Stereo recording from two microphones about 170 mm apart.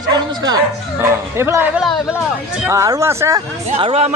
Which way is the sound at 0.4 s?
20° right (ahead or behind).